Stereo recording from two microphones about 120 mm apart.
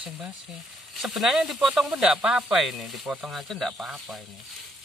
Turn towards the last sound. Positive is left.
turn(degrees=0)  # may be behind; listen again after turning